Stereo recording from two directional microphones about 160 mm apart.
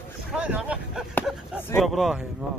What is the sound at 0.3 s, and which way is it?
Vehicle, 5° right (ahead or behind).